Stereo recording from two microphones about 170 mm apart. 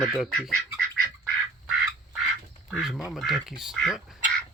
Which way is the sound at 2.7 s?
5° right (ahead or behind).